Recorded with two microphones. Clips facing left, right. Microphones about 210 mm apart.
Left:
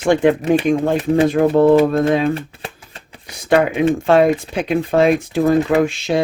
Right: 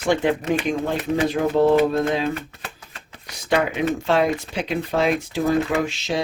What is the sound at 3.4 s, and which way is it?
Speech, 50° left (ahead or behind).